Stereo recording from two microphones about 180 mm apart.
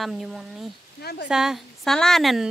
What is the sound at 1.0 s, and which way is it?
Speech, 60° left (ahead or behind).